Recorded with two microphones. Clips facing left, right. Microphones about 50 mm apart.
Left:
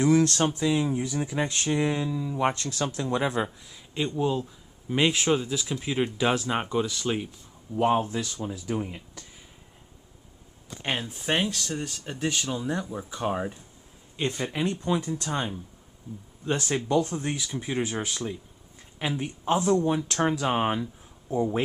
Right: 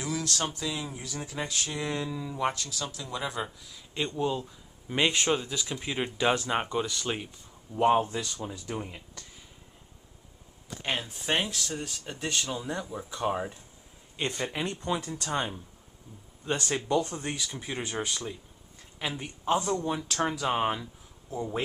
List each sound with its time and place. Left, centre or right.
0.0 s speech: left; by 1.5 s centre
1.5 s speech: left
2.0 s speech: centre
2.5 s speech: left
4.2 s speech: centre
10.8 s speech: centre
16.4 s speech: centre